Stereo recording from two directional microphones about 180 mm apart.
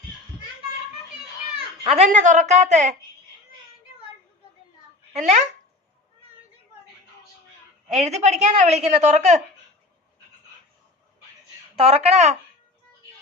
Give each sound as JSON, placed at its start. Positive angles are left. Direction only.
{"t": 1.8, "sound": "a woman's voice", "side_deg": -35}
{"t": 5.1, "sound": "a woman's voice", "side_deg": -40}
{"t": 7.9, "sound": "a woman's voice", "side_deg": -35}
{"t": 11.8, "sound": "a woman's voice", "side_deg": -35}